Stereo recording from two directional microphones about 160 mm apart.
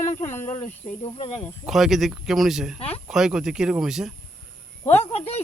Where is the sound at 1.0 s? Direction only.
40° left (ahead or behind).